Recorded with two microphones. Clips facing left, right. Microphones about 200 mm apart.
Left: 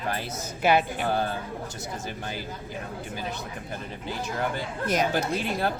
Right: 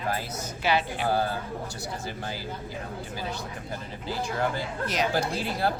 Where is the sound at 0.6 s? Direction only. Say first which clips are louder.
Left 4 dB; 50° left (ahead or behind).